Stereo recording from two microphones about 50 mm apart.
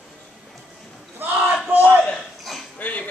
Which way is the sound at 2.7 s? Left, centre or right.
Left.